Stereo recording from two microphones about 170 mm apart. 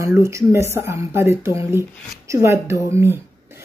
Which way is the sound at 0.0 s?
15° right (ahead or behind).